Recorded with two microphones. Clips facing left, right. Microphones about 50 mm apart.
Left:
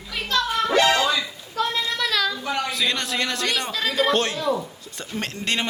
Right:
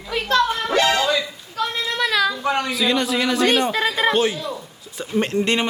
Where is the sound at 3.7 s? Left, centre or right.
Right.